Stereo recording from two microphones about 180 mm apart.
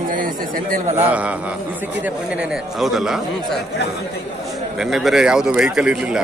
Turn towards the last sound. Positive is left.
turn(degrees=-5)  # may be behind; listen again after turning